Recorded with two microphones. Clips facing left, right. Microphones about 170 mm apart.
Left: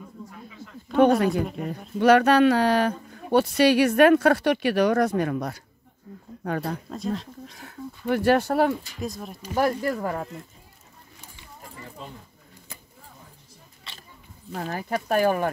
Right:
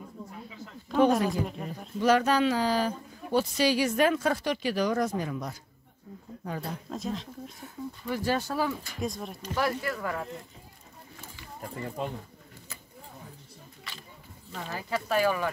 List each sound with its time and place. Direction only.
0.9 s speech: 65° left (ahead or behind)
6.9 s speech: centre (ahead or behind)
7.5 s speech: 75° left (ahead or behind)
9.0 s speech: centre (ahead or behind)
9.6 s speech: 40° left (ahead or behind)
14.5 s speech: 55° left (ahead or behind)